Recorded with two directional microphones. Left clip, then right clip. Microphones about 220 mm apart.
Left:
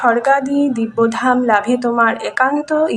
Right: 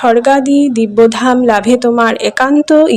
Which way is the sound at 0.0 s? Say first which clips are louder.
Right 5 dB; 50° right (ahead or behind).